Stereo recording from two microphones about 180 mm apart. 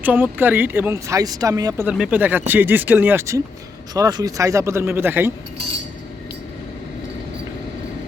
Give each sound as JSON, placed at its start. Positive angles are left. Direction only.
{"t": 0.0, "sound": "speech", "side_deg": -10}
{"t": 1.9, "sound": "speech", "side_deg": -5}